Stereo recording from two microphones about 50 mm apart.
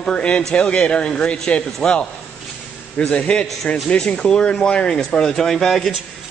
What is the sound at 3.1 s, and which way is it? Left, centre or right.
A man's voice, left.